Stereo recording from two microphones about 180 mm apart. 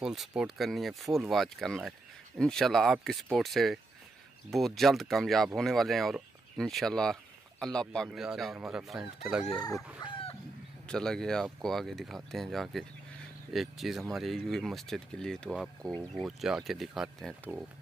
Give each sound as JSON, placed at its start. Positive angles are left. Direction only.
{"t": 0.0, "sound": "speech", "side_deg": 0}
{"t": 9.6, "sound": "chicken", "side_deg": 20}
{"t": 10.0, "sound": "chicken", "side_deg": 30}
{"t": 10.9, "sound": "speech", "side_deg": 5}